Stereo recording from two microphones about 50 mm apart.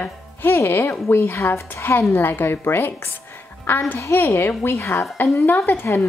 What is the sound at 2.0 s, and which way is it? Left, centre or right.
Speech, left.